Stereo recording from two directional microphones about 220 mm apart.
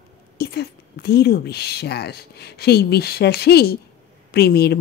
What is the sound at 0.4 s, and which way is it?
A woman's voice, 45° left (ahead or behind).